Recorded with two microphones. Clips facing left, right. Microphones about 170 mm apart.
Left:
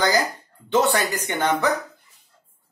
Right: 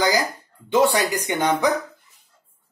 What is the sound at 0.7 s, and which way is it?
Speech, 10° right (ahead or behind).